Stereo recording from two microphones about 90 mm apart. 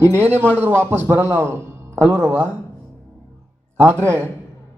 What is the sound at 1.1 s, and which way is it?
A man's voice, 25° right (ahead or behind).